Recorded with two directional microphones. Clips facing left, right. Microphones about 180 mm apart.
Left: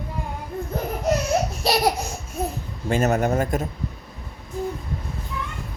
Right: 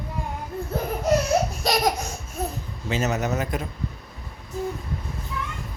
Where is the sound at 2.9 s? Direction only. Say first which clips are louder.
Left 4 dB; 55° left (ahead or behind).